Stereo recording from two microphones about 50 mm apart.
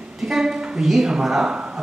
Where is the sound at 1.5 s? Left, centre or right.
Right.